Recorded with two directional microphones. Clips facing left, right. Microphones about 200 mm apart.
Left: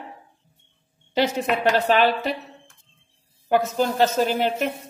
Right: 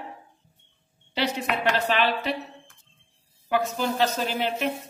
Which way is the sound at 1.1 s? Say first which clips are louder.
Left 5 dB; 45° left (ahead or behind).